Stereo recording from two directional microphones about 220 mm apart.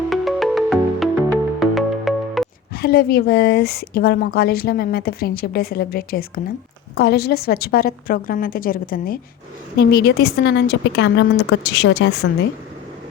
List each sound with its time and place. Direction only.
0.1 s music: centre (ahead or behind)
2.7 s a woman's voice: 45° left (ahead or behind)